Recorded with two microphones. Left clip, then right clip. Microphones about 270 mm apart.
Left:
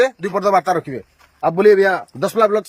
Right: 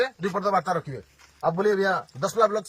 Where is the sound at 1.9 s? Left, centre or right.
Left.